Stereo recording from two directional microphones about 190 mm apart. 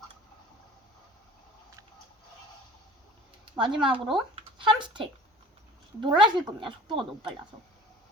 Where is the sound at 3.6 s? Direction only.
25° right (ahead or behind).